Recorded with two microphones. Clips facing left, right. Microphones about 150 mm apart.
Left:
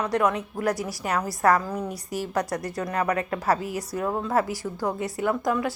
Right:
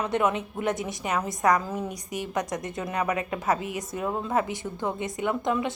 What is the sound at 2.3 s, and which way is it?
A woman's voice, 20° right (ahead or behind).